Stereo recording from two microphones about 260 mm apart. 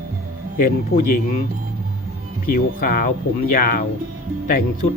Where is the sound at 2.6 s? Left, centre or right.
Left.